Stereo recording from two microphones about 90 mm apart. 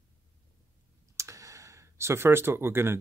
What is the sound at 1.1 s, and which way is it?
Clicking, 35° right (ahead or behind).